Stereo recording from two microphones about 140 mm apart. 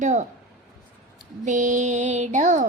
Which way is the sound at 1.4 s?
60° right (ahead or behind).